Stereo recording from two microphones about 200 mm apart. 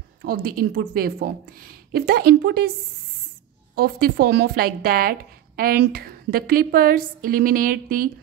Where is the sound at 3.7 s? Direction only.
50° right (ahead or behind).